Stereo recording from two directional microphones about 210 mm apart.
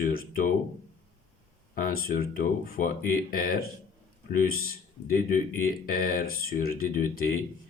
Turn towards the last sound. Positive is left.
turn(degrees=40)  # may be behind; listen again after turning